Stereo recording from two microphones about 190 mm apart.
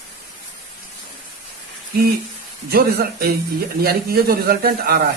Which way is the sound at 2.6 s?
55° right (ahead or behind).